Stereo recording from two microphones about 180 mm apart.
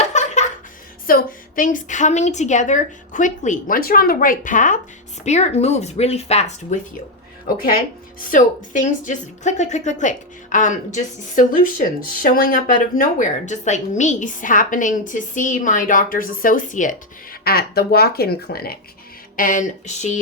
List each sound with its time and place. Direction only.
0.0 s laughter: 40° left (ahead or behind)
1.0 s speech: 50° left (ahead or behind)
8.2 s speech: 50° left (ahead or behind)
17.4 s speech: 55° left (ahead or behind)
19.4 s speech: 45° left (ahead or behind)